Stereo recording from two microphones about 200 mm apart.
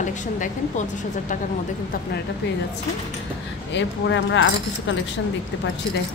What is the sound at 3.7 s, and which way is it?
Speech, 65° left (ahead or behind).